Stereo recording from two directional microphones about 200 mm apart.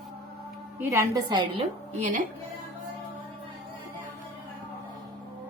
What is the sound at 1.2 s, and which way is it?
Speech, 25° right (ahead or behind).